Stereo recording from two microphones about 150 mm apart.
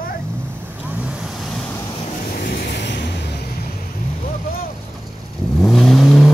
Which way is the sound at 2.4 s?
90° left.